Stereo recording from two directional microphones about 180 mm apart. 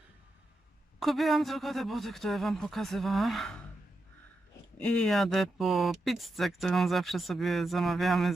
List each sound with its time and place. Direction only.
0.9 s speech: centre (ahead or behind)
4.8 s speech: 5° left (ahead or behind)